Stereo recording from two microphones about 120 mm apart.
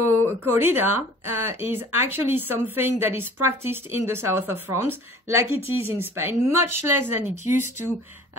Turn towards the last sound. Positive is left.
turn(degrees=-20)  # may be behind; listen again after turning